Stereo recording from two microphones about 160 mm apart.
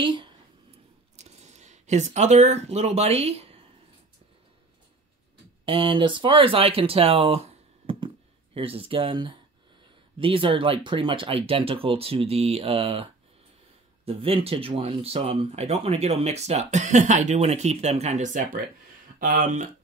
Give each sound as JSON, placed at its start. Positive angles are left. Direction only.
{"t": 0.0, "sound": "speech", "side_deg": -30}
{"t": 1.1, "sound": "speech", "side_deg": -45}
{"t": 5.7, "sound": "speech", "side_deg": -30}